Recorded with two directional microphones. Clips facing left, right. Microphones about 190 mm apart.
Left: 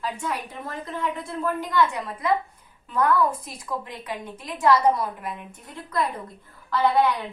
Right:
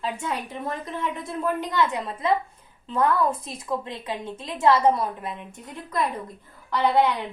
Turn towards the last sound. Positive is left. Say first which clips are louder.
# even
turn(degrees=-20)  # may be behind; listen again after turning